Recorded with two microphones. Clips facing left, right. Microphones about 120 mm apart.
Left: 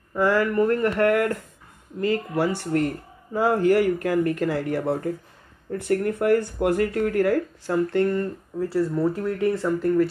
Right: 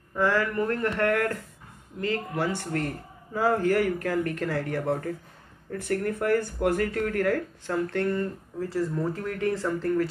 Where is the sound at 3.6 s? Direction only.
15° left (ahead or behind).